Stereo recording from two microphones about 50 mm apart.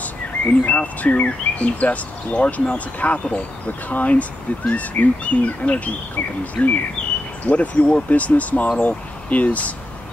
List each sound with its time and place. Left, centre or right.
0.0 s speech: left